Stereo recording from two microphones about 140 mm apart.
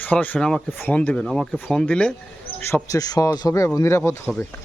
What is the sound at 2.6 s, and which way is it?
Speech, 20° left (ahead or behind).